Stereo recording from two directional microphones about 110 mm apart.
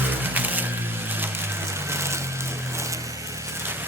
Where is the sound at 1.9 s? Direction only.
25° right (ahead or behind).